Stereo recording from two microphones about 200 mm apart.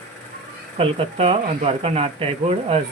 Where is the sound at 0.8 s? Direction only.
30° right (ahead or behind).